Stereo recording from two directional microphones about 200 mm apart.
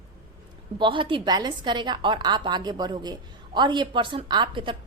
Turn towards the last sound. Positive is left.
turn(degrees=-25)  # may be behind; listen again after turning